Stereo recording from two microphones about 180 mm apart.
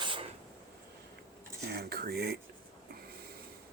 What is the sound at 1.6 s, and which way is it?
Speech, 60° right (ahead or behind).